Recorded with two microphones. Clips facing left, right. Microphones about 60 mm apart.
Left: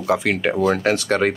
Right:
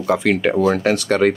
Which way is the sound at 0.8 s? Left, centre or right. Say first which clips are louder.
Right 2 dB; left.